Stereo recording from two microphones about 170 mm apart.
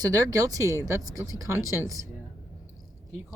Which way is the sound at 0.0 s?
20° right (ahead or behind).